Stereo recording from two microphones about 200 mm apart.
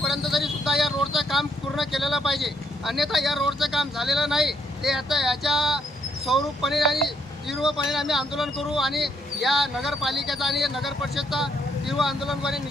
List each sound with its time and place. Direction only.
0.0 s speech: centre (ahead or behind)